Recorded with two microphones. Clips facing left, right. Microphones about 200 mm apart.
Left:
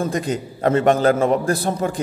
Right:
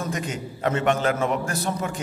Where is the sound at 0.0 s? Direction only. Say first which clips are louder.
Left 7 dB; 35° left (ahead or behind).